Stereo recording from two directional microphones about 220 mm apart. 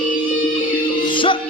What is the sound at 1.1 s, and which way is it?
Music, 20° left (ahead or behind).